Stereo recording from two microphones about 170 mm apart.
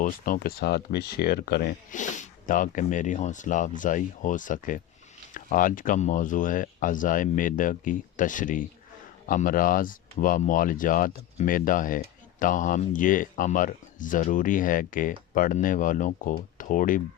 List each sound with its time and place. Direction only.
0.0 s speech: 60° left (ahead or behind)
1.9 s speech: 45° left (ahead or behind)